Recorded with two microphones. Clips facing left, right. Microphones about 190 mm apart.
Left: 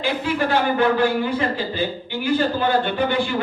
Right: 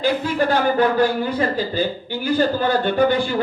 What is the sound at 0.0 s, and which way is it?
A man's voice, 40° right (ahead or behind).